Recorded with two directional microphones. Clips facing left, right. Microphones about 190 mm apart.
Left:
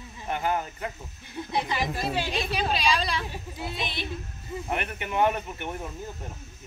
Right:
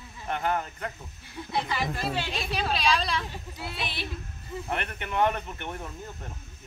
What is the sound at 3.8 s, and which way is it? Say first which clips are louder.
Speech: even; 5° right (ahead or behind).